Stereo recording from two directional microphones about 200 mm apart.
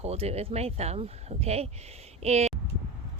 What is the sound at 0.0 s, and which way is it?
Speech, 30° right (ahead or behind).